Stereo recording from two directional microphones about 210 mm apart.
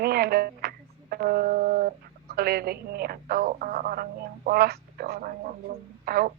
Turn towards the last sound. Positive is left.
turn(degrees=-45)  # may be behind; listen again after turning